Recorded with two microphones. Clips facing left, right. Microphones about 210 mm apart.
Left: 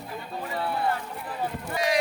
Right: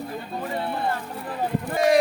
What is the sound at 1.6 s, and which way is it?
Speech, 50° right (ahead or behind).